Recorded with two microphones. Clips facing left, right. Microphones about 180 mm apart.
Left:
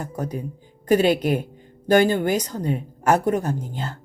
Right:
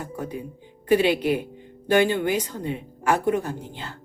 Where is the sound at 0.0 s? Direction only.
40° left (ahead or behind).